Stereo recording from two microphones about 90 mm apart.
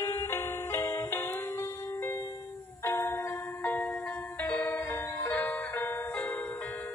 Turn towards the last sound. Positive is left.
turn(degrees=20)  # may be behind; listen again after turning